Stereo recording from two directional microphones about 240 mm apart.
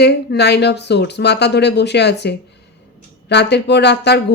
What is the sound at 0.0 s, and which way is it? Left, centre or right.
Speech, left.